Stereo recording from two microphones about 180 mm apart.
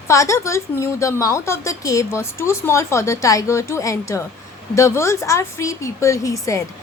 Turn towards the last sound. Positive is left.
turn(degrees=20)  # may be behind; listen again after turning